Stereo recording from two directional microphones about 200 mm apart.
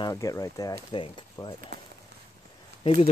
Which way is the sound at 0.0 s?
15° left (ahead or behind).